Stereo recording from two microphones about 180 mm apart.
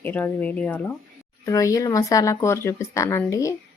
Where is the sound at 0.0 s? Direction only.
10° left (ahead or behind).